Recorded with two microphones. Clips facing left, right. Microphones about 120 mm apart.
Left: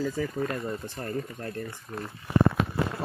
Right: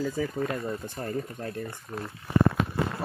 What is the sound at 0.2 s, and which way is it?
Speech, 10° right (ahead or behind).